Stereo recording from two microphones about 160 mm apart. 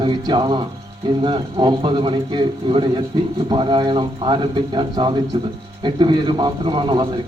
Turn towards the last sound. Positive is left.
turn(degrees=-30)  # may be behind; listen again after turning